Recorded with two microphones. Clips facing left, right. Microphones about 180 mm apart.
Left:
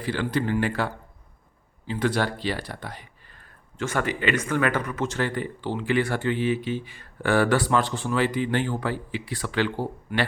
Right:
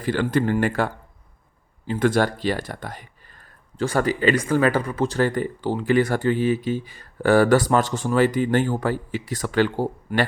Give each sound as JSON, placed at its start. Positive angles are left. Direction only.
{"t": 0.0, "sound": "speech", "side_deg": -50}
{"t": 3.8, "sound": "speech", "side_deg": -35}